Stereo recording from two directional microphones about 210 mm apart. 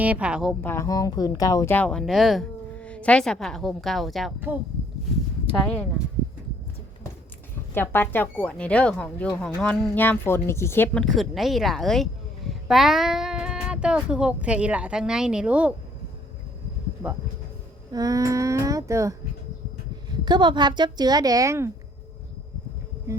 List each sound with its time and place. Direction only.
0.0 s speech: 5° right (ahead or behind)
0.6 s speech: 10° left (ahead or behind); by 4.5 s 5° right (ahead or behind)
7.7 s speech: 10° left (ahead or behind); by 15.7 s 5° right (ahead or behind)
17.9 s a sound: 15° right (ahead or behind)
20.2 s a woman's voice: 20° right (ahead or behind)
23.1 s a sound: 15° right (ahead or behind)